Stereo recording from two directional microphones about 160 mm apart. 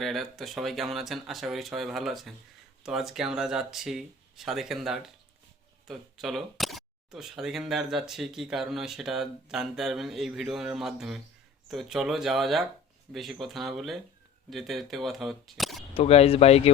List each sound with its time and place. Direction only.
0.0 s speech: centre (ahead or behind)
16.0 s speech: 40° left (ahead or behind)